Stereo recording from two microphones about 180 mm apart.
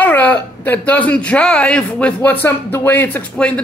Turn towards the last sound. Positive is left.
turn(degrees=10)  # may be behind; listen again after turning